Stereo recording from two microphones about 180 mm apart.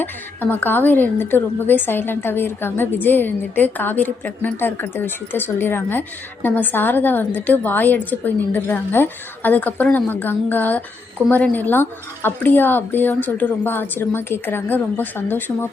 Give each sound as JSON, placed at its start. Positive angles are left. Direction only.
{"t": 0.0, "sound": "a woman's voice", "side_deg": 10}